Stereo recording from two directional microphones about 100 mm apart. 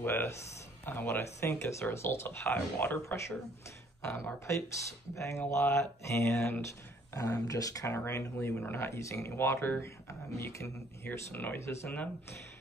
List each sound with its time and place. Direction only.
0.0 s speech: 20° left (ahead or behind)
11.1 s speech: 20° left (ahead or behind)